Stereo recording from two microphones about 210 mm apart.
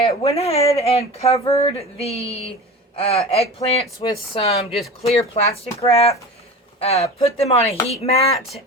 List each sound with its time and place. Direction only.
0.0 s speech: 25° left (ahead or behind)